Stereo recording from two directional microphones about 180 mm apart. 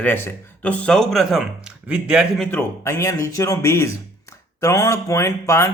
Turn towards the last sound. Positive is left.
turn(degrees=15)  # may be behind; listen again after turning